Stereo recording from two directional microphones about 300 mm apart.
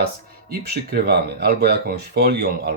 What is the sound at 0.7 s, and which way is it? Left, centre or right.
Speech, right.